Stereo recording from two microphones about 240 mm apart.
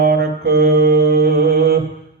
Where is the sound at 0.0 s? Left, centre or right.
Right.